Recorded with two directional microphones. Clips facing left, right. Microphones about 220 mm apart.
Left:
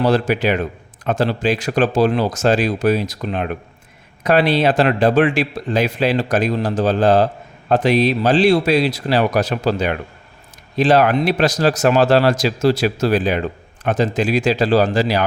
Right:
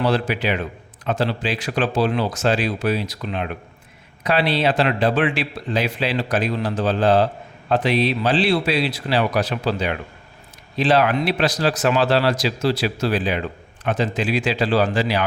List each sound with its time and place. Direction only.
0.0 s a man's voice: 45° left (ahead or behind)